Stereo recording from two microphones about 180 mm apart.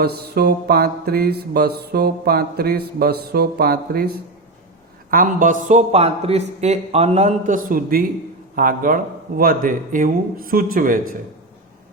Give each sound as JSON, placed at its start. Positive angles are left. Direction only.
{"t": 0.0, "sound": "mantra", "side_deg": -60}
{"t": 5.1, "sound": "speech", "side_deg": -50}